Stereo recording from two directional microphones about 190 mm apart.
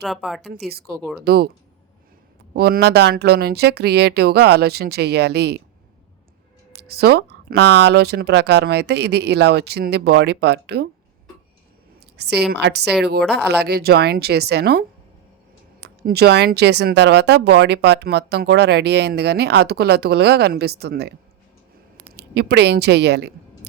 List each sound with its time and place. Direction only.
0.0 s speech: centre (ahead or behind)
1.2 s speech: 55° right (ahead or behind)
2.6 s speech: 55° right (ahead or behind)
6.7 s speech: 55° right (ahead or behind)
12.1 s speech: 60° right (ahead or behind)
22.1 s a woman's voice: 60° right (ahead or behind)